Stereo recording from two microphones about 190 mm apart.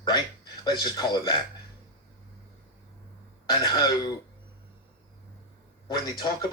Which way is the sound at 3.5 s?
20° left (ahead or behind).